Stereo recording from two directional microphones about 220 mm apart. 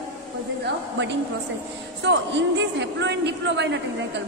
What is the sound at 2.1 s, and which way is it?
A man's voice, 55° right (ahead or behind).